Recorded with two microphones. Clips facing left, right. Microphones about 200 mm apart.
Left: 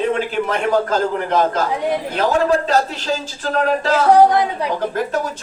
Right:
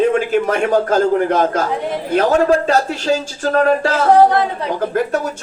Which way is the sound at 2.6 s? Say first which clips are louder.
Right 3 dB; 50° right (ahead or behind).